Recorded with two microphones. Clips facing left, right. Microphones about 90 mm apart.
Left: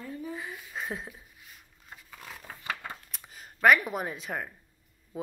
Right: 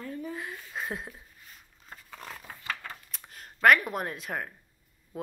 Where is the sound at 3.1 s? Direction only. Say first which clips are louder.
Right 1 dB; centre (ahead or behind).